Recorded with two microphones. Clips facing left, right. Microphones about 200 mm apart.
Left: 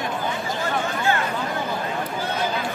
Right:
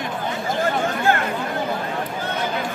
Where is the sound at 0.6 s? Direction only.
50° right (ahead or behind).